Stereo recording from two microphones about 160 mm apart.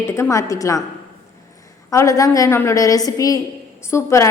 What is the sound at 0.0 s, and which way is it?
Speech, 15° left (ahead or behind).